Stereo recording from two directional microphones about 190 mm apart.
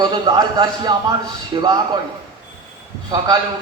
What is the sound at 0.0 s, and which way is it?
A man's voice, 20° right (ahead or behind).